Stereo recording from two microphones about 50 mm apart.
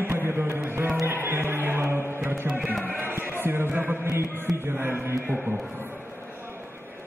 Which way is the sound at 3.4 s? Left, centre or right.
Right.